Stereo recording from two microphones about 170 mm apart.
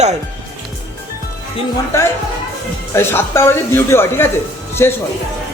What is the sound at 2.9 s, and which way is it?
Speech, 15° left (ahead or behind).